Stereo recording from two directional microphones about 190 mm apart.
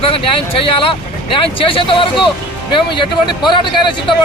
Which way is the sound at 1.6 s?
30° left (ahead or behind).